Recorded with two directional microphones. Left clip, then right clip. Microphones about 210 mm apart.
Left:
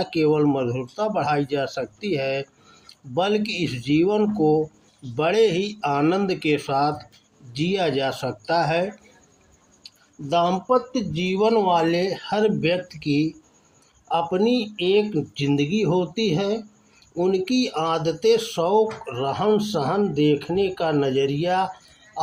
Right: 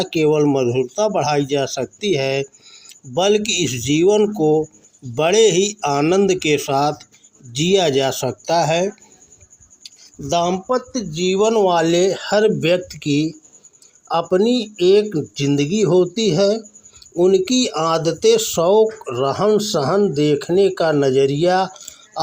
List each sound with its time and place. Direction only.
0.0 s speech: 40° right (ahead or behind)